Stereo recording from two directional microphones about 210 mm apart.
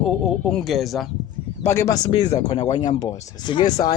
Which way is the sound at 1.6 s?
15° left (ahead or behind).